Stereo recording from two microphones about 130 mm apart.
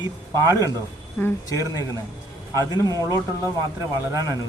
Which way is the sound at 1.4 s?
25° left (ahead or behind).